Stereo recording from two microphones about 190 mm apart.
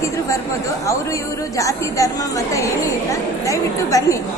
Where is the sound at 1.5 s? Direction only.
15° left (ahead or behind).